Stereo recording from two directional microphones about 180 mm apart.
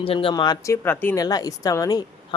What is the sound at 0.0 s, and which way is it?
Speech, 30° left (ahead or behind).